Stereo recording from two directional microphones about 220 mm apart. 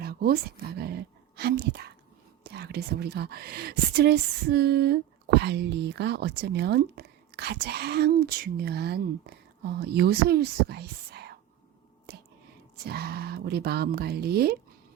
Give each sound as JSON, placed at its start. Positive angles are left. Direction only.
{"t": 0.0, "sound": "dog", "side_deg": -45}
{"t": 0.8, "sound": "speech", "side_deg": -45}
{"t": 12.1, "sound": "whispering", "side_deg": -45}
{"t": 12.7, "sound": "speech", "side_deg": -45}